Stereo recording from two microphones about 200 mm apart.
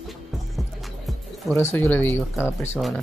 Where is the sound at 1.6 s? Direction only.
10° left (ahead or behind).